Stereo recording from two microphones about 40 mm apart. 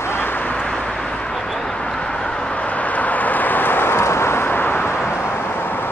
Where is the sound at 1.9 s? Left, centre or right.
Centre.